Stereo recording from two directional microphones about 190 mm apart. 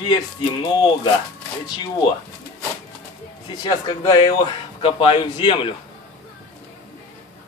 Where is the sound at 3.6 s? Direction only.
20° left (ahead or behind).